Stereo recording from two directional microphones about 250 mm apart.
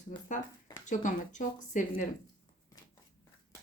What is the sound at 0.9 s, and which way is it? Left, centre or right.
Speech, left.